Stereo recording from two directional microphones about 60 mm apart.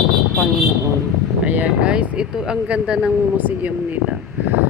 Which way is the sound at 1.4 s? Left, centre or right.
Right.